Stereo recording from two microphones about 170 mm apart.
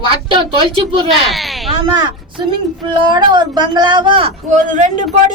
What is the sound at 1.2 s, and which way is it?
Speech, centre (ahead or behind).